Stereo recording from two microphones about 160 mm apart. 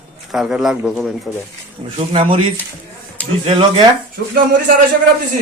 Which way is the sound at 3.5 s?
30° right (ahead or behind).